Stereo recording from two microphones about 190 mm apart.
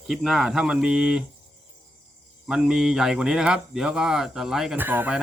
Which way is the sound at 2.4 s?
5° right (ahead or behind).